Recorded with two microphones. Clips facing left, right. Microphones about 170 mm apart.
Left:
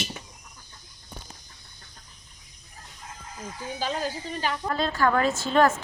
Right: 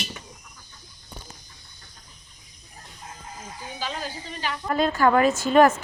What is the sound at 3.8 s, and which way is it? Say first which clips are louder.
Speech: left 3 dB; 40° left (ahead or behind).